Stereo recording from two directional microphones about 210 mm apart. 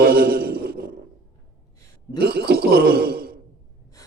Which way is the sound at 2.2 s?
50° right (ahead or behind).